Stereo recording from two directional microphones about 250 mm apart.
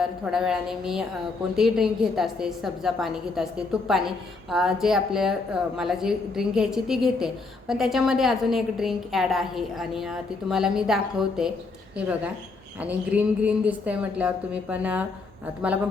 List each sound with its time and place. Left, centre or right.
0.0 s a woman's voice: centre